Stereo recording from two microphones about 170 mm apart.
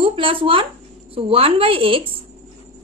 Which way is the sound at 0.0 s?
30° right (ahead or behind).